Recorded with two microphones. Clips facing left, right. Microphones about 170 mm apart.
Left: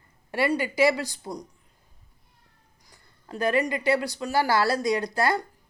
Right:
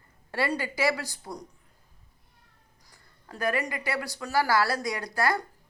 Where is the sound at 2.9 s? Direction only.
20° left (ahead or behind).